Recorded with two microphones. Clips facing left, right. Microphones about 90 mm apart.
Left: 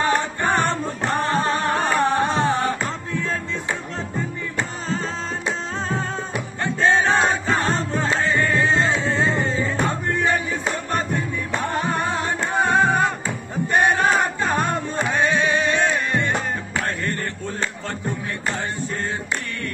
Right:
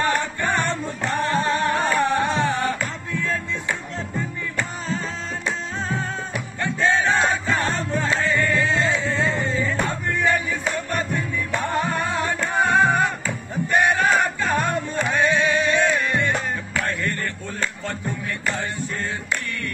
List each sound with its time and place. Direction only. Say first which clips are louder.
0.0 s music: left 2 dB; 30° left (ahead or behind)
5.9 s music: left 1 dB; 30° left (ahead or behind)